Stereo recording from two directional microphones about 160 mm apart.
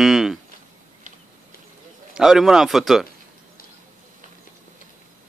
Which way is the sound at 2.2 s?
5° right (ahead or behind).